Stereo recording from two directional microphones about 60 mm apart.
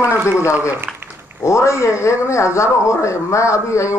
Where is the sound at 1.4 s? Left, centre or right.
Left.